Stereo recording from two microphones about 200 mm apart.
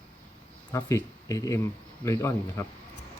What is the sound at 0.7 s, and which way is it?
Speech, 15° left (ahead or behind).